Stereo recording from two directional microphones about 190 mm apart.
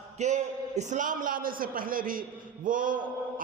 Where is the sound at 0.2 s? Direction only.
35° right (ahead or behind).